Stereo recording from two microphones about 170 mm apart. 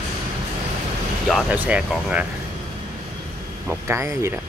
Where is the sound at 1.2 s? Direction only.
5° right (ahead or behind).